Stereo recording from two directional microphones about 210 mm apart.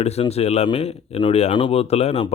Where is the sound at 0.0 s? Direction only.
30° left (ahead or behind).